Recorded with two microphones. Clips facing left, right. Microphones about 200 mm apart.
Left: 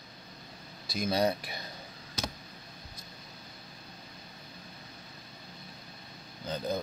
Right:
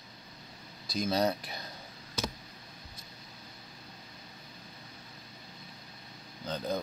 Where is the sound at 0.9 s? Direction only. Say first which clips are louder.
Left 1 dB; 10° left (ahead or behind).